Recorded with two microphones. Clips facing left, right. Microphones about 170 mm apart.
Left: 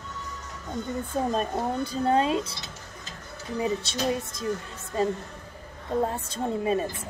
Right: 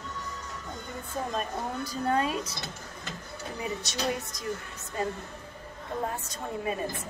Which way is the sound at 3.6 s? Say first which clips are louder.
Left 5 dB; 25° left (ahead or behind).